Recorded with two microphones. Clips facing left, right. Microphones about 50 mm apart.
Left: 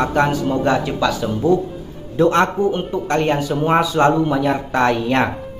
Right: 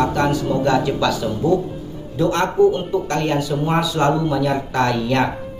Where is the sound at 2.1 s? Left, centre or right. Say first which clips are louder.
Left 3 dB; left.